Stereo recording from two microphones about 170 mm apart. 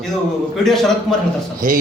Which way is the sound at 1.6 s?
50° right (ahead or behind).